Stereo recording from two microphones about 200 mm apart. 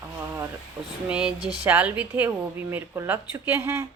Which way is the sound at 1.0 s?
5° right (ahead or behind).